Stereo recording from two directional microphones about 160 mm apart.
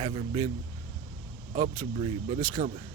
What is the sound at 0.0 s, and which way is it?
Speech, 35° right (ahead or behind).